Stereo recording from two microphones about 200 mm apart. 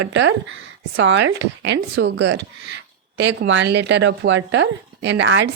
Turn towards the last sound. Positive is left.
turn(degrees=-70)  # may be behind; listen again after turning